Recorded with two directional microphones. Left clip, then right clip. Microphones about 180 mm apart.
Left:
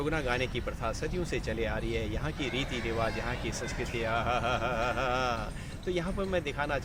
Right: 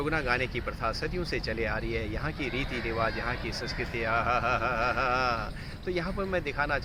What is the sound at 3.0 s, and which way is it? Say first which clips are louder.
Speech: right 4 dB; centre (ahead or behind).